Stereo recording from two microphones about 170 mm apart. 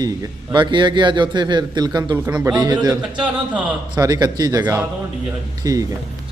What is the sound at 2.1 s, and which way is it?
A man's voice, 10° right (ahead or behind).